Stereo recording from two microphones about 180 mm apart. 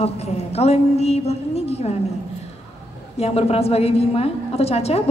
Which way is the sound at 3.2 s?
35° left (ahead or behind).